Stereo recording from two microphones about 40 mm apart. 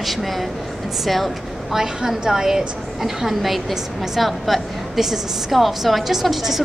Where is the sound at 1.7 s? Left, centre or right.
Centre.